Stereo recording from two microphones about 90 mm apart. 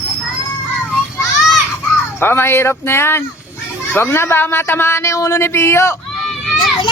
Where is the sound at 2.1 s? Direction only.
25° left (ahead or behind).